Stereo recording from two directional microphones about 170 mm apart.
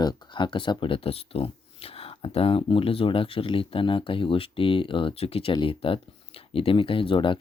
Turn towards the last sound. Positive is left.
turn(degrees=30)  # may be behind; listen again after turning